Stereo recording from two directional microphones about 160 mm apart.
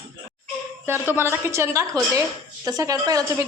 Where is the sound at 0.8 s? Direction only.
15° right (ahead or behind).